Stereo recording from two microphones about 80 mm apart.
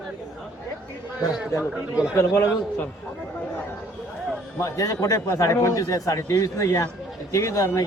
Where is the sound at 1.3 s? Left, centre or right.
Centre.